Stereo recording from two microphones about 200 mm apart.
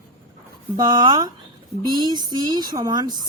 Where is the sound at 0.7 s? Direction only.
20° right (ahead or behind).